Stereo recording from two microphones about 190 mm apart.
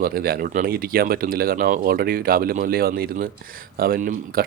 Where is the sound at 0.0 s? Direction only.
50° right (ahead or behind).